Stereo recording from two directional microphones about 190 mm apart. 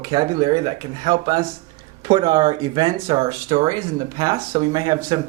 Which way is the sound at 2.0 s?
25° right (ahead or behind).